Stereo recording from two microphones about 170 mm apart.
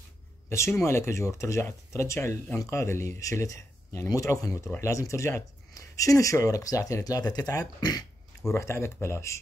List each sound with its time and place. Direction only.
0.5 s speech: 15° left (ahead or behind)